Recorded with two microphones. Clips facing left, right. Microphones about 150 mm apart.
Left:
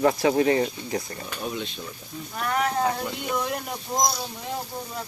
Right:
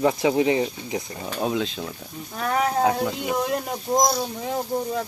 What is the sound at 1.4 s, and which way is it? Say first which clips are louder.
Speech: right 8 dB; 90° right.